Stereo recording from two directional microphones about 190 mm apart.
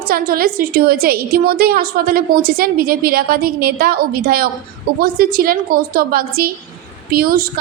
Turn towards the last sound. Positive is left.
turn(degrees=-50)  # may be behind; listen again after turning